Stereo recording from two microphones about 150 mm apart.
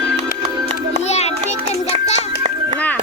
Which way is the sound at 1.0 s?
45° left (ahead or behind).